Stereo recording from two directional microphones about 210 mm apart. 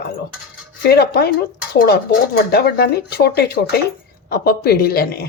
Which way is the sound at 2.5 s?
50° left (ahead or behind).